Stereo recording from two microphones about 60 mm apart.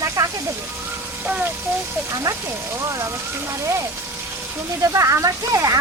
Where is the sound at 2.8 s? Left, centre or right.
Right.